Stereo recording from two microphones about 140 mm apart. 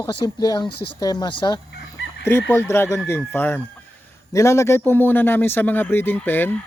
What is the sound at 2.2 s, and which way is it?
Speech, 15° left (ahead or behind).